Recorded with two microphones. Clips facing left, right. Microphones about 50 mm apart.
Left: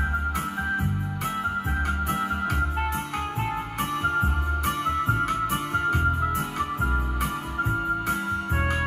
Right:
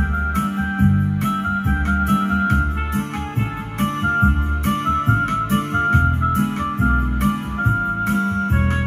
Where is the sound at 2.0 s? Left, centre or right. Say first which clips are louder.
Right 8 dB; right.